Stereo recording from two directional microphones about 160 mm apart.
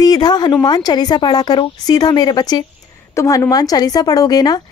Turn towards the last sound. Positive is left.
turn(degrees=25)  # may be behind; listen again after turning